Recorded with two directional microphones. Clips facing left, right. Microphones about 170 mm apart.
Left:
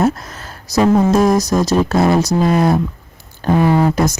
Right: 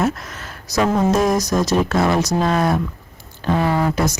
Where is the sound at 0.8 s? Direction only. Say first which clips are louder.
Left 4 dB; 30° left (ahead or behind).